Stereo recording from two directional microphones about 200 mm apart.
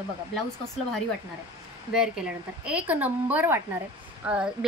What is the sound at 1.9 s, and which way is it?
A woman's voice, 5° right (ahead or behind).